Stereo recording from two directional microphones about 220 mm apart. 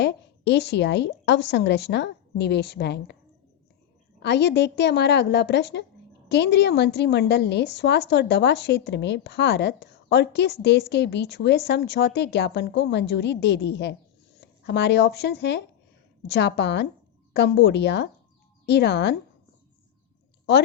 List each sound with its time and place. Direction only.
0.0 s a woman's voice: 50° left (ahead or behind)
4.2 s a woman's voice: 50° left (ahead or behind)